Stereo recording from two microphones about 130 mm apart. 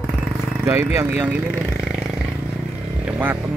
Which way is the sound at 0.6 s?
20° right (ahead or behind).